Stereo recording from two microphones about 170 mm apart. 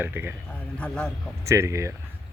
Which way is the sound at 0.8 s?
5° left (ahead or behind).